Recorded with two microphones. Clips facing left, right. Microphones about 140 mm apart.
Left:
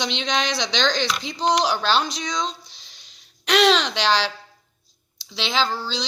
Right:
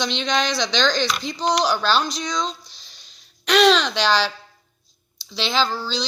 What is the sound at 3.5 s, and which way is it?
Speech, 25° left (ahead or behind).